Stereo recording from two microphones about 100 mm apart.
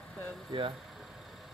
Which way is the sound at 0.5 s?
55° right (ahead or behind).